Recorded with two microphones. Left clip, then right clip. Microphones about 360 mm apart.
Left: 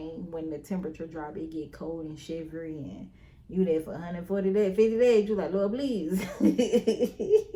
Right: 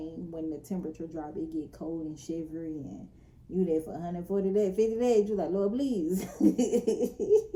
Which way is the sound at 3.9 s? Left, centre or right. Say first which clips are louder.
Even; centre.